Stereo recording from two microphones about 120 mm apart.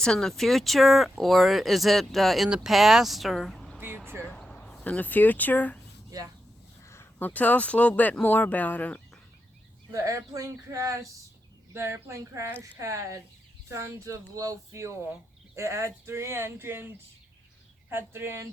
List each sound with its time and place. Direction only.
0.0 s speech: 5° left (ahead or behind)
3.8 s a sound: 15° right (ahead or behind)
4.4 s speech: 5° left (ahead or behind)
6.1 s speech: 30° right (ahead or behind)
6.8 s speech: 20° left (ahead or behind)
9.9 s speech: 25° right (ahead or behind)